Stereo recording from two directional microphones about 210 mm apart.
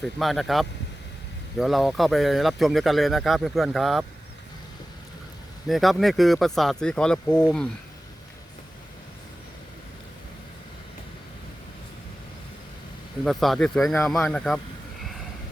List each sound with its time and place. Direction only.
0.0 s speech: centre (ahead or behind)
5.6 s speech: centre (ahead or behind)
13.2 s speech: centre (ahead or behind)